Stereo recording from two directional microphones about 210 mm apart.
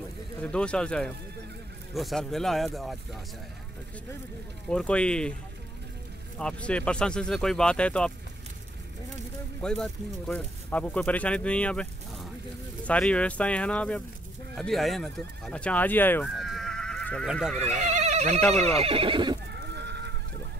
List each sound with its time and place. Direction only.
0.4 s speech: 5° left (ahead or behind)
4.6 s speech: 5° left (ahead or behind)
6.3 s speech: 5° left (ahead or behind)
9.6 s speech: 5° left (ahead or behind)
16.3 s neigh: centre (ahead or behind)
17.6 s speech: 35° right (ahead or behind)
18.5 s neigh: 30° right (ahead or behind)
19.7 s goat: 55° right (ahead or behind)